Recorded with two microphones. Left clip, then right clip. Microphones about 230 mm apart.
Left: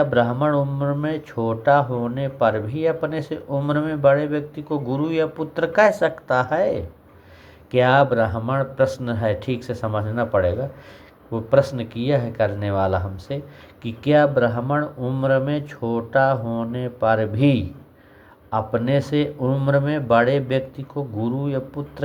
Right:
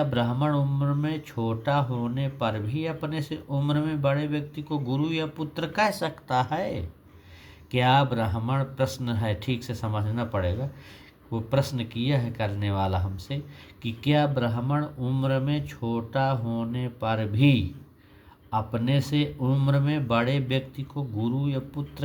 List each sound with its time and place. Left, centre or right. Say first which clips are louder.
0.0 s speech: left 8 dB; right